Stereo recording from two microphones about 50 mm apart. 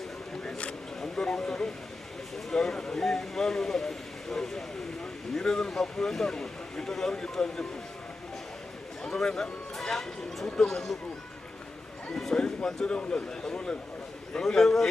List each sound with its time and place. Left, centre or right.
1.0 s speech: centre
9.0 s speech: centre
12.3 s speech: centre